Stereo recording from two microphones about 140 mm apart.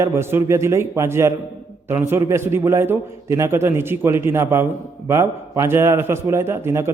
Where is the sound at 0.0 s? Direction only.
20° right (ahead or behind).